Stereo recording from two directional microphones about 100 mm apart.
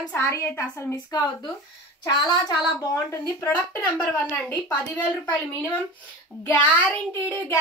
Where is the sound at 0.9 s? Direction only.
40° left (ahead or behind).